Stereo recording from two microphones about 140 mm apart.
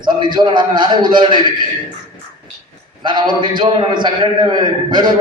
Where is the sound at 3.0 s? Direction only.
35° right (ahead or behind).